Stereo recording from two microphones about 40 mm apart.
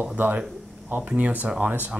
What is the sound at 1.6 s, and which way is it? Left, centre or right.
Speech, right.